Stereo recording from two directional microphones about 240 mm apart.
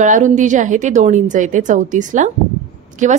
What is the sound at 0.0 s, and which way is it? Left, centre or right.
A woman's voice, right.